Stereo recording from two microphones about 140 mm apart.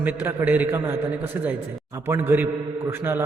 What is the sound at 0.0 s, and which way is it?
A man's voice, 15° right (ahead or behind).